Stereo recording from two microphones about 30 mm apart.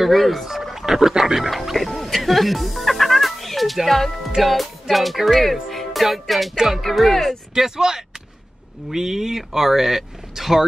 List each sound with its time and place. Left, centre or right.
0.0 s speech: centre
0.5 s frog: centre
1.2 s speech: centre
1.5 s speech: centre
6.5 s speech: centre
6.8 s speech: centre